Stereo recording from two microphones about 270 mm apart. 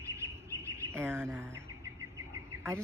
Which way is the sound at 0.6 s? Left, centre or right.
Centre.